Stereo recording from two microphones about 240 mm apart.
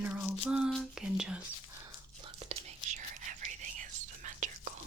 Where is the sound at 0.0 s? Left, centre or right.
Centre.